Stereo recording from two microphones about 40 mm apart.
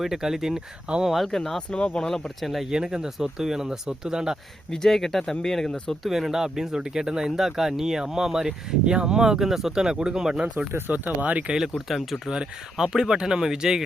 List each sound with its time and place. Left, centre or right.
0.0 s speech: centre
1.3 s speech: centre
2.4 s speech: centre
2.6 s speech: centre
4.7 s speech: centre
6.1 s speech: centre
10.7 s speech: right
10.9 s speech: right
12.7 s speech: centre